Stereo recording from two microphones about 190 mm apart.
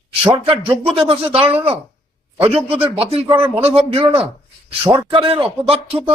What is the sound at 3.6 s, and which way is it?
Speech, 30° right (ahead or behind).